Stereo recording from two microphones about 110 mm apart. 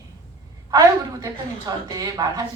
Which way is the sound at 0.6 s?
35° right (ahead or behind).